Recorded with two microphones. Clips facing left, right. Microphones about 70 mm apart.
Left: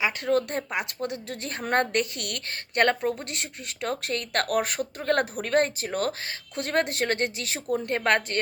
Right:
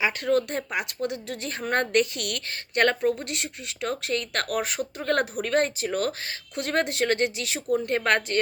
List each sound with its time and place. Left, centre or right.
0.3 s a woman's voice: left